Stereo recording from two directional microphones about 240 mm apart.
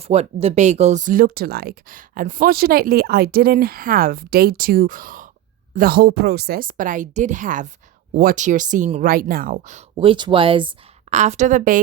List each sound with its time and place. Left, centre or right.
0.0 s speech: right